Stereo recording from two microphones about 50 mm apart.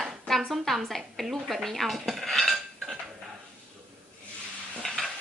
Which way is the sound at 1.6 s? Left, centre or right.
Centre.